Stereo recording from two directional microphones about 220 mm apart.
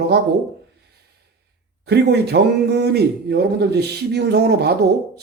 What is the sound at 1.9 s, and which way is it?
Speech, 50° right (ahead or behind).